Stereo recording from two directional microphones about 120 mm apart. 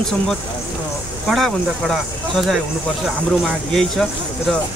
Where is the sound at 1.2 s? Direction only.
5° left (ahead or behind).